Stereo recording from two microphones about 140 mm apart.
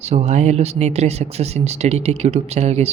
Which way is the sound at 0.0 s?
50° right (ahead or behind).